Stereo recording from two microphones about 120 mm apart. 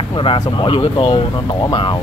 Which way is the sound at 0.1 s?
45° left (ahead or behind).